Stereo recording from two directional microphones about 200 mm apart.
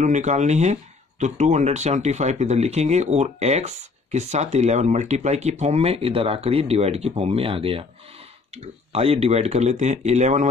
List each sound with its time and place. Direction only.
0.0 s speech: 35° right (ahead or behind)
8.9 s speech: 30° right (ahead or behind)